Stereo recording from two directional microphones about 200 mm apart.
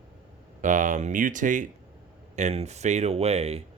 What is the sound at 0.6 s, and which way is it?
Speech, 40° right (ahead or behind).